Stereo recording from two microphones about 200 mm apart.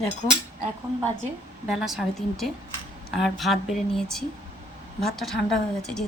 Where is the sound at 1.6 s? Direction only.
5° right (ahead or behind).